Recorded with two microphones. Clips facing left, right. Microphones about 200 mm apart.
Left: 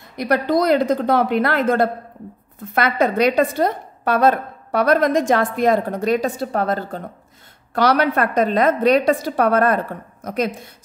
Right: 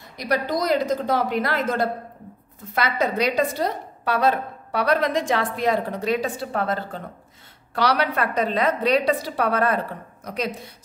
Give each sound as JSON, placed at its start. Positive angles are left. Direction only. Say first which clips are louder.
{"t": 0.2, "sound": "a woman's voice", "louder": "left 6 dB", "side_deg": 55}